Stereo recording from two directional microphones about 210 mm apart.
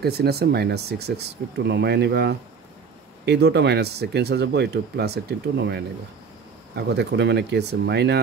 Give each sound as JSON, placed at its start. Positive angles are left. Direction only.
{"t": 0.0, "sound": "speech", "side_deg": -50}